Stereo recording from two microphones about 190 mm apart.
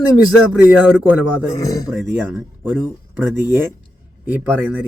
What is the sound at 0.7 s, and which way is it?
Speech, 5° right (ahead or behind).